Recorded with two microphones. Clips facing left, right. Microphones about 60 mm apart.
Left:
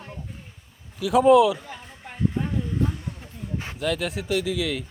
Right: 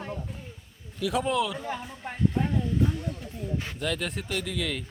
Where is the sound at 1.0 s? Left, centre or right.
Centre.